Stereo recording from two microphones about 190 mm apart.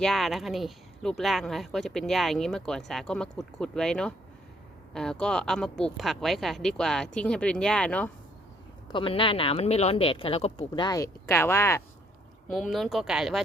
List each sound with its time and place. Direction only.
0.0 s speech: centre (ahead or behind)
8.9 s speech: 25° left (ahead or behind)
12.5 s speech: centre (ahead or behind)